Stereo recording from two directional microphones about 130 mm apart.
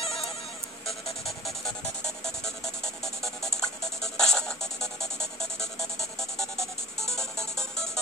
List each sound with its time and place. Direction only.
0.0 s sheep: 50° left (ahead or behind)
0.8 s music: centre (ahead or behind)